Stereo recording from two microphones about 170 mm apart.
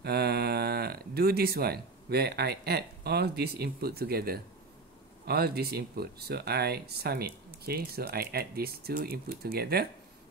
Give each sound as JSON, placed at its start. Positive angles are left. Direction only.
{"t": 0.0, "sound": "speech", "side_deg": -70}